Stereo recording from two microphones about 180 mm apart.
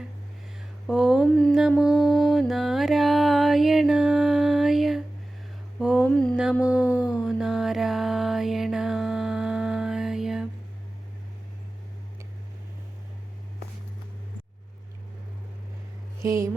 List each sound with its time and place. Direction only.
0.9 s mantra: centre (ahead or behind)
1.8 s music: 5° right (ahead or behind)
5.8 s mantra: 5° right (ahead or behind)
6.8 s a sound: 15° left (ahead or behind)
7.1 s mantra: centre (ahead or behind)
16.2 s a sound: 15° right (ahead or behind)